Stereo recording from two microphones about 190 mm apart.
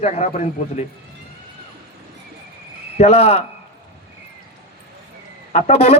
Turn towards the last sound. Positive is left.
turn(degrees=30)  # may be behind; listen again after turning